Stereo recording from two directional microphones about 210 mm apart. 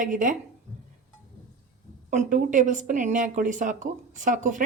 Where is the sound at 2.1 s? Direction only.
35° right (ahead or behind).